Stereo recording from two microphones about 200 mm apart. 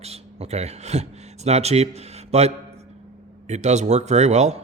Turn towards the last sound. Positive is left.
turn(degrees=-35)  # may be behind; listen again after turning